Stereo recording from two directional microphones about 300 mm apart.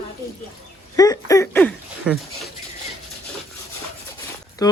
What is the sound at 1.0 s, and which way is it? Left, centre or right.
A man's voice, centre.